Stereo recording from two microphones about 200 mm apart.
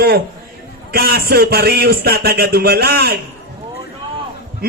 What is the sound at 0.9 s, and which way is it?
A man's voice, 50° right (ahead or behind).